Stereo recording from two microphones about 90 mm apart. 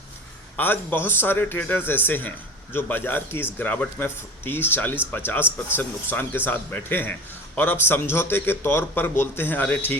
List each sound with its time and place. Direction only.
0.5 s a man's voice: 20° left (ahead or behind)